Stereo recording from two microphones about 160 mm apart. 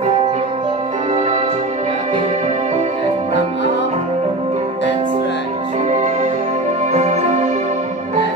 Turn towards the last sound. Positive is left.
turn(degrees=-45)  # may be behind; listen again after turning